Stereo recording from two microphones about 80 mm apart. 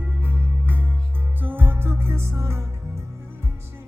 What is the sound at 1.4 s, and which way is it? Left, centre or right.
Music, right.